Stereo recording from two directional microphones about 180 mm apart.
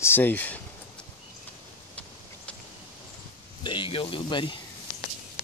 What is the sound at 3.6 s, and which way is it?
Speech, 25° left (ahead or behind).